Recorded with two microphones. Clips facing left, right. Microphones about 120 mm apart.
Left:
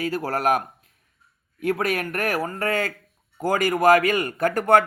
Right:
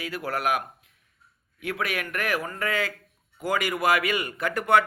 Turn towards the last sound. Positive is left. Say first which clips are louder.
# left 4 dB
turn(degrees=45)  # may be behind; listen again after turning